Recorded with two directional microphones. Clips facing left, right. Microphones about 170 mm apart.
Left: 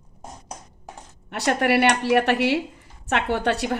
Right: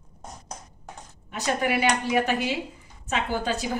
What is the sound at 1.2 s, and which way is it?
A woman's voice, 70° left (ahead or behind).